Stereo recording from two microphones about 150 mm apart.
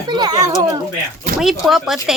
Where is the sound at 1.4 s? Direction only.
5° right (ahead or behind).